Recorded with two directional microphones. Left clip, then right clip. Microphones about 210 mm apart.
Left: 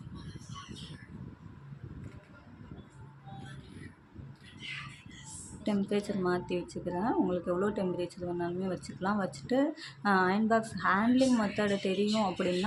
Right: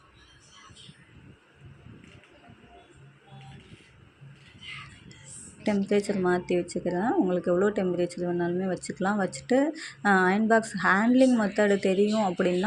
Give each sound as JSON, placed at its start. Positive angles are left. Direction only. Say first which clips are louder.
{"t": 5.9, "sound": "speech", "louder": "right 7 dB", "side_deg": -20}